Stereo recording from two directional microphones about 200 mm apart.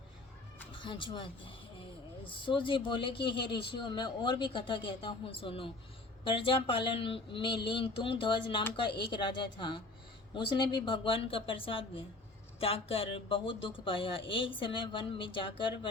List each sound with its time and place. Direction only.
0.8 s speech: 25° left (ahead or behind)